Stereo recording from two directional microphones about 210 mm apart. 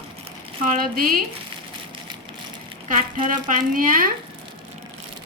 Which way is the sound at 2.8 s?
40° right (ahead or behind).